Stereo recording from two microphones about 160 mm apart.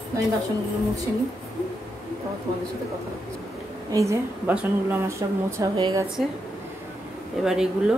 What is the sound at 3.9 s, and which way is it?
A woman's voice, 20° right (ahead or behind).